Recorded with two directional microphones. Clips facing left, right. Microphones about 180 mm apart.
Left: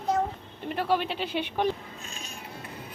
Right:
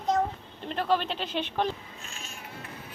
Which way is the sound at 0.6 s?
10° left (ahead or behind).